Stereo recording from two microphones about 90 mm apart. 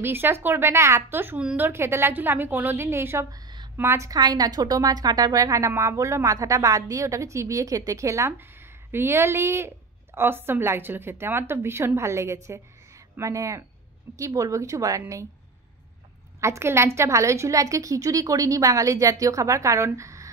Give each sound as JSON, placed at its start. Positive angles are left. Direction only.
{"t": 0.0, "sound": "a woman's voice", "side_deg": -25}
{"t": 3.3, "sound": "a sound", "side_deg": -50}
{"t": 3.7, "sound": "a woman's voice", "side_deg": -30}
{"t": 4.1, "sound": "a woman's voice", "side_deg": -50}
{"t": 16.3, "sound": "a woman's voice", "side_deg": -30}